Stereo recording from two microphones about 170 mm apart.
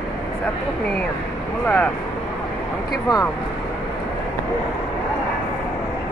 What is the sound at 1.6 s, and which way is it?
Speech, 10° left (ahead or behind).